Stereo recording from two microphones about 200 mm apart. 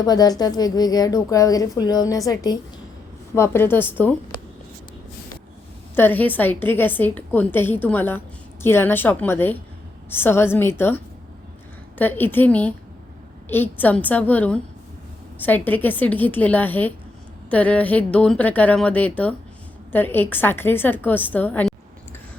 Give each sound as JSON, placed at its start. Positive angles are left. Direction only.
{"t": 0.0, "sound": "a woman's voice", "side_deg": 20}
{"t": 6.0, "sound": "a woman's voice", "side_deg": 10}